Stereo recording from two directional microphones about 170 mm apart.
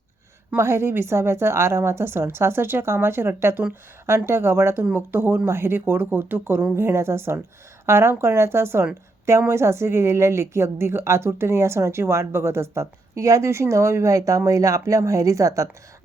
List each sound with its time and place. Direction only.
0.5 s a woman's voice: 15° right (ahead or behind)